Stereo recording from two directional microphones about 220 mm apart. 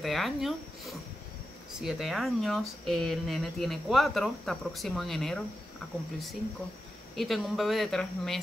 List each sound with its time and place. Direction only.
0.0 s speech: centre (ahead or behind)
7.2 s speech: centre (ahead or behind)